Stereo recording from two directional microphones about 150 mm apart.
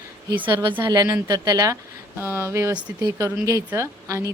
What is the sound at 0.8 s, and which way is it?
A woman's voice, 25° right (ahead or behind).